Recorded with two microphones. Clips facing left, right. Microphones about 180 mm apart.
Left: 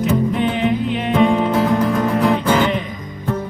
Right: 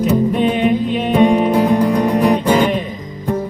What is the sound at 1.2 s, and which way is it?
Music, 15° right (ahead or behind).